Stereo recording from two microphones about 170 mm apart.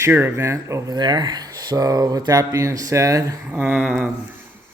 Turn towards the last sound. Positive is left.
turn(degrees=-5)  # may be behind; listen again after turning